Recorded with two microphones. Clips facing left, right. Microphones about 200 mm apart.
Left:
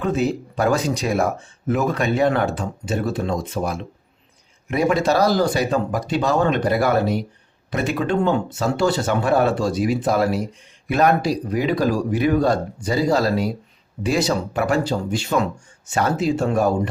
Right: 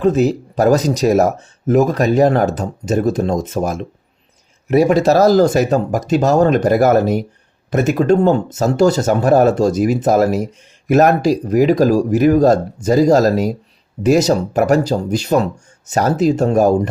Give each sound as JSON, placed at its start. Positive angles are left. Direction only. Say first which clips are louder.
{"t": 0.0, "sound": "speech", "louder": "right 7 dB", "side_deg": -40}